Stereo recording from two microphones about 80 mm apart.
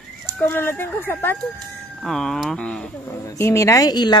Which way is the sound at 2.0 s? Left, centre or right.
Centre.